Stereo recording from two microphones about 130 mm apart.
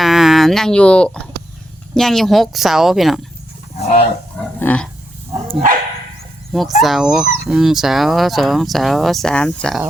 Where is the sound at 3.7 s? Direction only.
55° left (ahead or behind).